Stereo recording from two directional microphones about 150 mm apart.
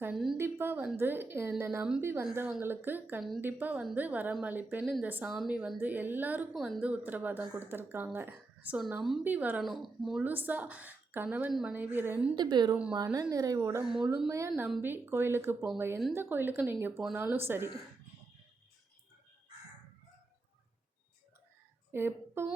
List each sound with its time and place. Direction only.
0.1 s speech: centre (ahead or behind)
0.3 s speech: 15° right (ahead or behind)
9.6 s speech: centre (ahead or behind)
12.4 s speech: 30° right (ahead or behind)
13.8 s speech: centre (ahead or behind)
14.3 s speech: 20° right (ahead or behind)
21.9 s speech: 15° right (ahead or behind)